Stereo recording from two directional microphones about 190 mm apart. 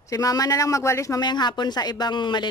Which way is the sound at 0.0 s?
15° left (ahead or behind).